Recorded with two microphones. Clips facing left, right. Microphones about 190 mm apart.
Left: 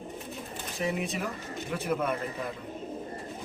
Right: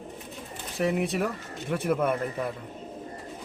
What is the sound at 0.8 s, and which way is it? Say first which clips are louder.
Speech: right 5 dB; 60° right (ahead or behind).